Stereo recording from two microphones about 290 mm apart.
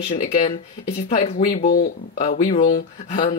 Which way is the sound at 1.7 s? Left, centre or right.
Left.